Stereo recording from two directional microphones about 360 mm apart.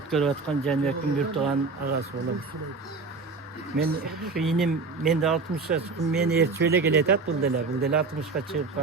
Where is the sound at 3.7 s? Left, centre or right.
Right.